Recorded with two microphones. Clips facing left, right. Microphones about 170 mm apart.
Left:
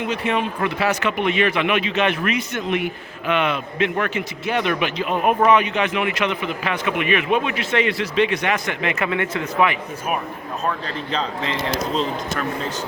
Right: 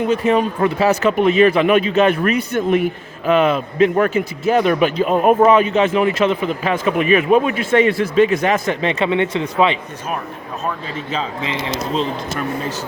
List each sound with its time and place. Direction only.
0.0 s a man's voice: 40° right (ahead or behind)
8.6 s speech: 30° right (ahead or behind)
10.8 s speech: 5° right (ahead or behind)